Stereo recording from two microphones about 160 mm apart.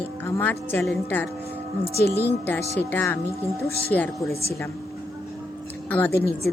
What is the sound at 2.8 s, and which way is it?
Speech, 15° left (ahead or behind).